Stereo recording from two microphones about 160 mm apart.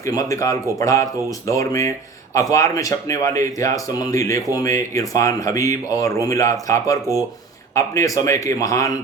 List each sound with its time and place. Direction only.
0.0 s speech: 20° left (ahead or behind)